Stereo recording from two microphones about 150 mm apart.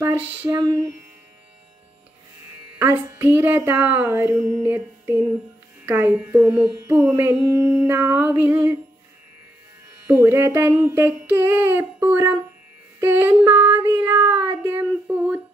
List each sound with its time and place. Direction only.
0.0 s a sound: 20° right (ahead or behind)
2.8 s mantra: 15° right (ahead or behind)
10.0 s mantra: 15° right (ahead or behind)